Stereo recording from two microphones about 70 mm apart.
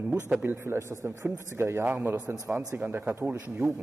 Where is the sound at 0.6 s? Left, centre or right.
Right.